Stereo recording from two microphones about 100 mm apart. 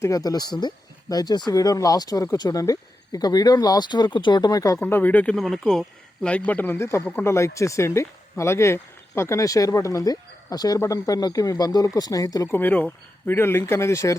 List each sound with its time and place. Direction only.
0.0 s speech: 35° left (ahead or behind)
4.8 s speech: 20° left (ahead or behind)
5.4 s speech: 5° left (ahead or behind)
6.2 s speech: 15° left (ahead or behind); by 12.5 s 35° left (ahead or behind)
12.5 s speech: 20° left (ahead or behind)